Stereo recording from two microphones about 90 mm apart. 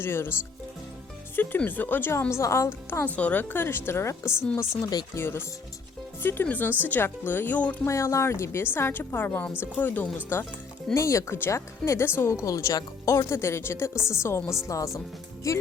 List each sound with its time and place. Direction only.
0.0 s a woman's voice: 25° left (ahead or behind)
1.4 s a woman's voice: 20° left (ahead or behind)
3.2 s a woman's voice: 20° left (ahead or behind)
7.9 s a woman's voice: 35° left (ahead or behind)
10.9 s speech: 35° left (ahead or behind)